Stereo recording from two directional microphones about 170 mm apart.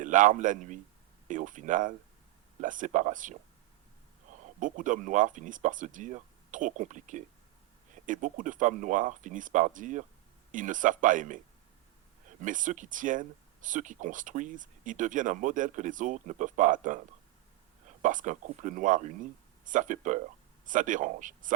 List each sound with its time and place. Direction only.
0.0 s a man's voice: 50° right (ahead or behind)
4.3 s a sound: 45° right (ahead or behind)
4.6 s speech: 50° right (ahead or behind)
12.4 s speech: 50° right (ahead or behind)
18.0 s speech: 50° right (ahead or behind)